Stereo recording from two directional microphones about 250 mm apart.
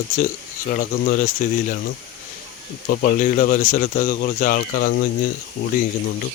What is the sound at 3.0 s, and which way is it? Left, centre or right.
Speech, left.